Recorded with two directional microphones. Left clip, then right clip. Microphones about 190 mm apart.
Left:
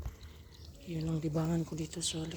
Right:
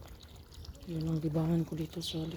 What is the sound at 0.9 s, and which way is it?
Speech, 15° right (ahead or behind).